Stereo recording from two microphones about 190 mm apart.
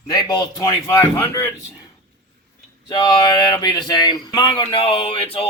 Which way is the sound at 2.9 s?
20° left (ahead or behind).